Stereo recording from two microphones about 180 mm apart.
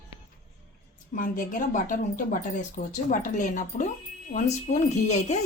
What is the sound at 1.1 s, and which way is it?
A woman's voice, 50° left (ahead or behind).